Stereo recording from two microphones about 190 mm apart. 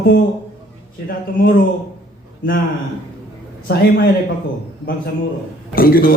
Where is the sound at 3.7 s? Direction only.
55° left (ahead or behind).